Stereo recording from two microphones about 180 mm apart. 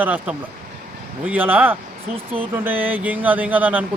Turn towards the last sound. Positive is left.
turn(degrees=-10)  # may be behind; listen again after turning